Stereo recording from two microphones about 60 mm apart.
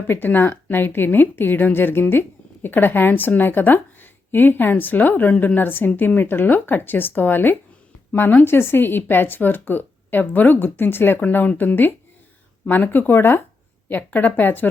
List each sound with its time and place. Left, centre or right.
0.1 s speech: left
5.3 s a woman's voice: centre
5.5 s speech: left